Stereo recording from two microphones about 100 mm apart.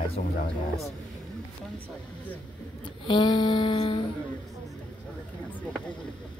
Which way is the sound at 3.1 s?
45° left (ahead or behind).